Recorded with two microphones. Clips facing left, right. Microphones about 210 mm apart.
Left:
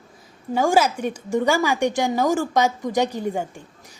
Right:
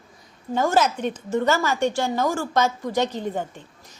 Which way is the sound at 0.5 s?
10° left (ahead or behind).